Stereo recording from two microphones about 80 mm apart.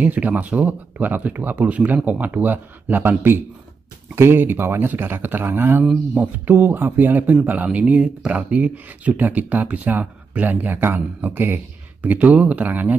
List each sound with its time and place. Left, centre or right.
0.0 s speech: centre